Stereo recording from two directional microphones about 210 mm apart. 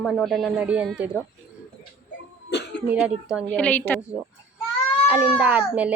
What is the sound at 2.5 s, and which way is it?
Cough, 55° left (ahead or behind).